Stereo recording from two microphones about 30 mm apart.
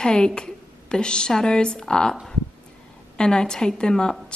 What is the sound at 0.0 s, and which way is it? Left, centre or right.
Speech, left.